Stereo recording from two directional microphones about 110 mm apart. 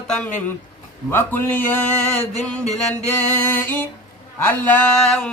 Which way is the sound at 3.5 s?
15° left (ahead or behind).